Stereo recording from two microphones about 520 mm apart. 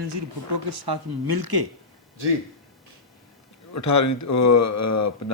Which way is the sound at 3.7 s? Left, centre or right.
Left.